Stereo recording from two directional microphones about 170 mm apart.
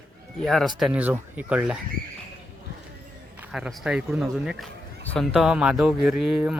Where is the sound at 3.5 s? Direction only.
5° right (ahead or behind).